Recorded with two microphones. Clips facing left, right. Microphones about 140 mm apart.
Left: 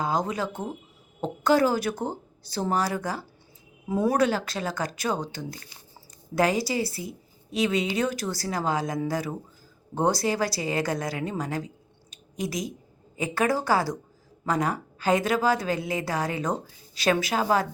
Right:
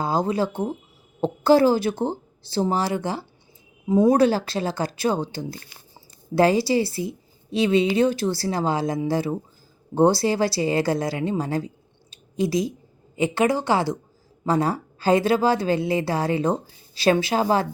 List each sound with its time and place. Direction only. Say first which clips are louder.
0.0 s a woman's voice: right 4 dB; 30° right (ahead or behind)
4.2 s a woman's voice: right 5 dB; 30° right (ahead or behind)
12.1 s a sound: right 8 dB; 30° right (ahead or behind)
13.1 s a woman's voice: right 4 dB; 25° right (ahead or behind)